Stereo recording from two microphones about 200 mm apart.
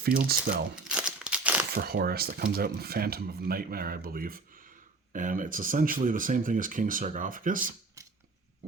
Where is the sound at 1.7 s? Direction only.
50° right (ahead or behind).